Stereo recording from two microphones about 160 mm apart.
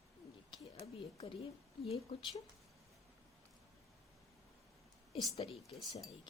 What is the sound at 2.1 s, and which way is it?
Speech, 35° left (ahead or behind).